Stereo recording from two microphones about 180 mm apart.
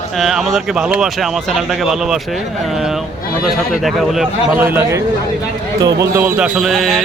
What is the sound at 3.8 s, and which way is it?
A man's voice, centre (ahead or behind).